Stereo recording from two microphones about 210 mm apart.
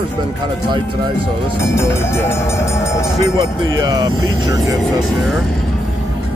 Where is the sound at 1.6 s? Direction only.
10° left (ahead or behind).